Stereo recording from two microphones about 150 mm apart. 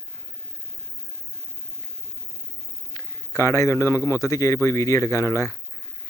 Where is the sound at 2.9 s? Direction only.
20° left (ahead or behind).